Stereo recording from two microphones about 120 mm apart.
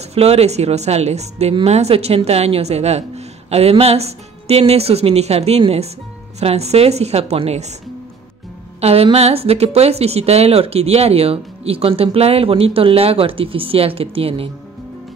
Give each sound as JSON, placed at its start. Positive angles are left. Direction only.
{"t": 0.1, "sound": "a woman's voice", "side_deg": -60}
{"t": 8.8, "sound": "a woman's voice", "side_deg": -55}